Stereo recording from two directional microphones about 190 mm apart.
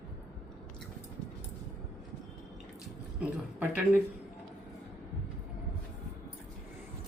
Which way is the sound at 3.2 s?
10° right (ahead or behind).